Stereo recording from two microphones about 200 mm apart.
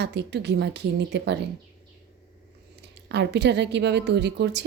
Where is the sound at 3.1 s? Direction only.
60° right (ahead or behind).